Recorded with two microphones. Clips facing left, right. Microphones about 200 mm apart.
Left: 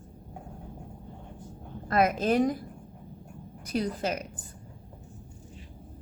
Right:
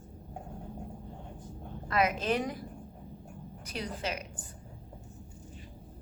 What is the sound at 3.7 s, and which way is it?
Speech, 45° left (ahead or behind).